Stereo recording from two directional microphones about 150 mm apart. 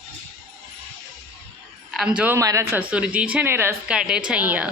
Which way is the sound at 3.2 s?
10° right (ahead or behind).